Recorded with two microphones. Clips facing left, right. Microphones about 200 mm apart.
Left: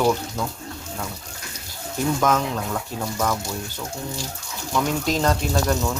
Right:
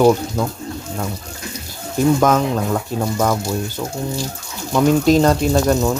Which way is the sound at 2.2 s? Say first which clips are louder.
Right 6 dB; 45° right (ahead or behind).